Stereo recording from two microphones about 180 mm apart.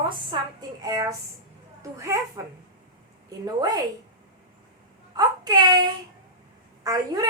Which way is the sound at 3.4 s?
20° right (ahead or behind).